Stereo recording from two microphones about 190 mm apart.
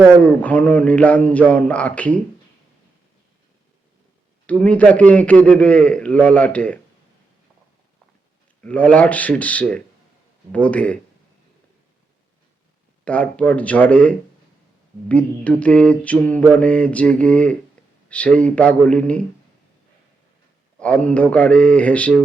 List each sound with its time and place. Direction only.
0.2 s a man's voice: 10° left (ahead or behind)
4.4 s a man's voice: 5° left (ahead or behind)
8.6 s a man's voice: 5° left (ahead or behind)
13.1 s a man's voice: 5° left (ahead or behind)
20.7 s a man's voice: 5° left (ahead or behind)